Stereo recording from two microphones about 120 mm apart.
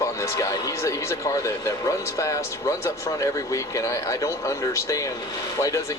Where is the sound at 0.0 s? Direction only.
25° left (ahead or behind).